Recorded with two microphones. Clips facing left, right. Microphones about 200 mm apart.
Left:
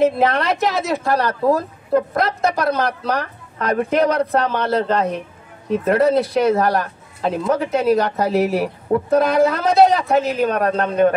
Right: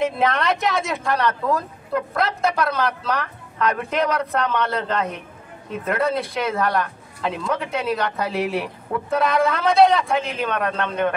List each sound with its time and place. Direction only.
0.0 s a woman's voice: 35° left (ahead or behind)